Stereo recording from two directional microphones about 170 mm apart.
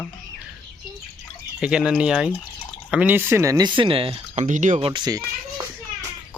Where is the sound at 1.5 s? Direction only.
5° right (ahead or behind); by 4.4 s 35° right (ahead or behind).